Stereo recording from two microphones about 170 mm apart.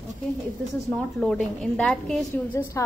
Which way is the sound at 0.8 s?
5° left (ahead or behind).